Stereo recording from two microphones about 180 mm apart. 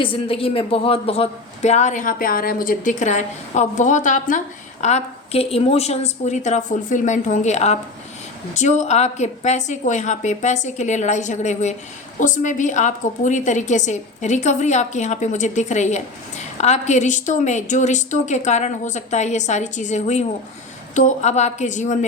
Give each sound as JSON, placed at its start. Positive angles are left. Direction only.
{"t": 0.0, "sound": "a man's voice", "side_deg": 30}